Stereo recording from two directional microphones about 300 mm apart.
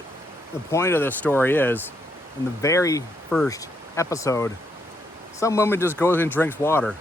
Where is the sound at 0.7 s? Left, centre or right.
Centre.